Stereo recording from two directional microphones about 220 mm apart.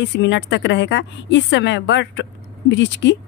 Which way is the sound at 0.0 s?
55° left (ahead or behind).